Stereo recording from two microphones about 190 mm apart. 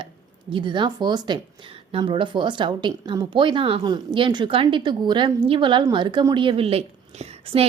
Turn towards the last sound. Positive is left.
turn(degrees=-30)  # may be behind; listen again after turning